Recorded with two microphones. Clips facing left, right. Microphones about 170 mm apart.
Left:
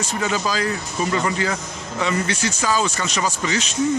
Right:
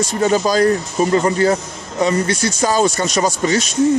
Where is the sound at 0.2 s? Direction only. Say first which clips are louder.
Right 9 dB; 40° right (ahead or behind).